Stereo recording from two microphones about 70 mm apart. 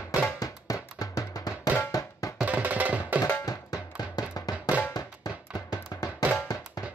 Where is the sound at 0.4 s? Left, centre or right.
Left.